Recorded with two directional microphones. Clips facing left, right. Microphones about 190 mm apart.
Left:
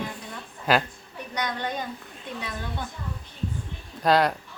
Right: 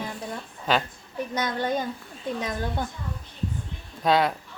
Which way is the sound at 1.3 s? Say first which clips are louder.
Right 3 dB; 45° right (ahead or behind).